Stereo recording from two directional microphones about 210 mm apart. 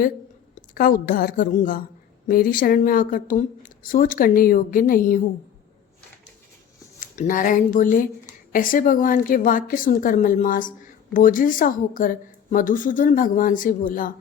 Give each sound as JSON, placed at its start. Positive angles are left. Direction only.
{"t": 0.5, "sound": "speech", "side_deg": 40}
{"t": 7.0, "sound": "speech", "side_deg": 40}